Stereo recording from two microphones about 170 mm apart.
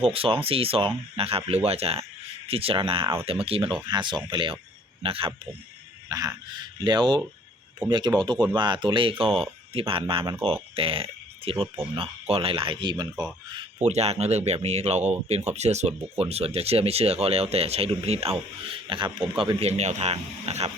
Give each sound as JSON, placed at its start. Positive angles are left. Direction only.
{"t": 0.0, "sound": "speech", "side_deg": -35}
{"t": 3.0, "sound": "speech", "side_deg": -15}
{"t": 3.4, "sound": "speech", "side_deg": -30}
{"t": 6.1, "sound": "speech", "side_deg": -20}
{"t": 13.7, "sound": "speech", "side_deg": -40}